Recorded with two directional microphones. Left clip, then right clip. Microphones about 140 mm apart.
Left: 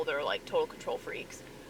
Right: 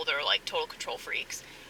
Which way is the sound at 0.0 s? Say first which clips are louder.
Right 4 dB; 30° right (ahead or behind).